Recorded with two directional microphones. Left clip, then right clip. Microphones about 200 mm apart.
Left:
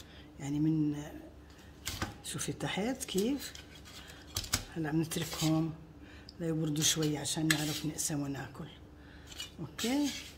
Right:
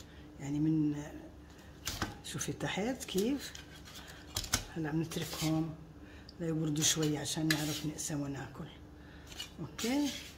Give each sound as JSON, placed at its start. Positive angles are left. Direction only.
{"t": 0.4, "sound": "speech", "side_deg": 15}
{"t": 2.2, "sound": "speech", "side_deg": 10}
{"t": 4.3, "sound": "typewriter", "side_deg": 0}
{"t": 4.8, "sound": "speech", "side_deg": 15}